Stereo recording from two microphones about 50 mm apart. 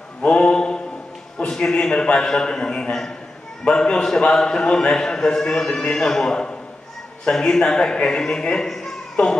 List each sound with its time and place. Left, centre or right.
0.2 s mantra: centre
1.5 s a man's voice: centre
8.6 s a sound: centre